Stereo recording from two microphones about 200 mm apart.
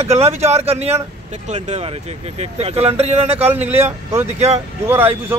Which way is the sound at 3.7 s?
10° right (ahead or behind).